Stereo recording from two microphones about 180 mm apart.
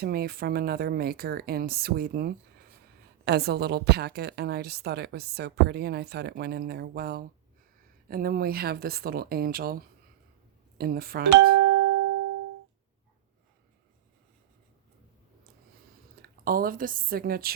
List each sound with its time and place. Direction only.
0.0 s a woman's voice: 60° right (ahead or behind)
16.2 s a woman's voice: 55° right (ahead or behind)